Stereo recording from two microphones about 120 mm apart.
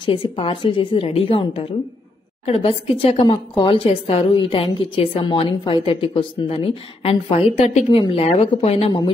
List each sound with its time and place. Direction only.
0.0 s speech: 45° left (ahead or behind)
1.0 s speech: 55° left (ahead or behind)
8.0 s speech: 50° left (ahead or behind)